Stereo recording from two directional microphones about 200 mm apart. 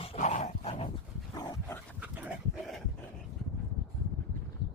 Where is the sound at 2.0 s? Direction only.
5° right (ahead or behind).